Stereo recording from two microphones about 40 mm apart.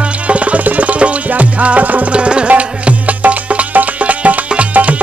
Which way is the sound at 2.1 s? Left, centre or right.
Right.